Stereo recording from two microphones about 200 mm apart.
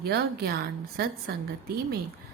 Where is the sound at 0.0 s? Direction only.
50° right (ahead or behind).